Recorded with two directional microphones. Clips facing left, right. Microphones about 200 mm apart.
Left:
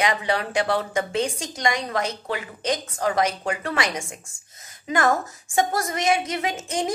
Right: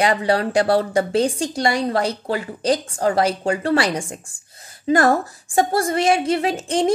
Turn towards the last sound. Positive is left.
turn(degrees=-30)  # may be behind; listen again after turning